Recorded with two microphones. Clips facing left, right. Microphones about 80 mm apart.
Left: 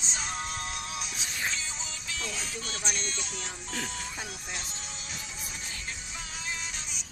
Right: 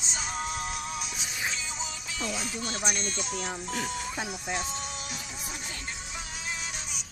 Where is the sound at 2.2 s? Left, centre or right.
Centre.